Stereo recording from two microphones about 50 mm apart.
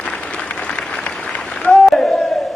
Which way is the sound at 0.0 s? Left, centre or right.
Left.